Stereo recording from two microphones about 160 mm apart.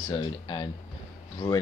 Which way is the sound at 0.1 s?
30° left (ahead or behind).